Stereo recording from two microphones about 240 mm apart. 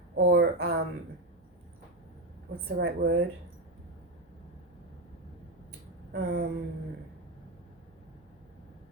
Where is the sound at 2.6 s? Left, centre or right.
Right.